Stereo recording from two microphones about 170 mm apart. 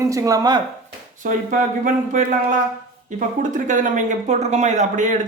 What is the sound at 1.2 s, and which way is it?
Speech, 50° right (ahead or behind).